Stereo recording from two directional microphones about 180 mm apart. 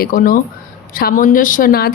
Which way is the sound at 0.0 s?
50° left (ahead or behind).